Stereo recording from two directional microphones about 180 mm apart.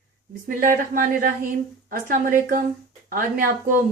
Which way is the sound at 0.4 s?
50° right (ahead or behind).